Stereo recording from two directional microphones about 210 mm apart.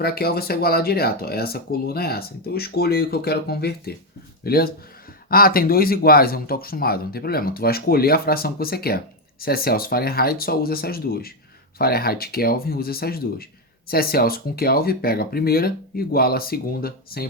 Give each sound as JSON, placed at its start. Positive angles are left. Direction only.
{"t": 0.0, "sound": "speech", "side_deg": 50}